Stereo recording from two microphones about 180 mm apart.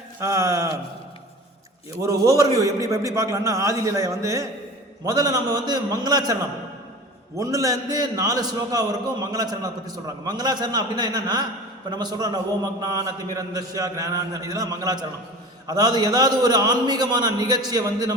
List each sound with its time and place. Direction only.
0.2 s a man's voice: 15° right (ahead or behind)
2.0 s a man's voice: 20° right (ahead or behind)
7.3 s a man's voice: 20° right (ahead or behind)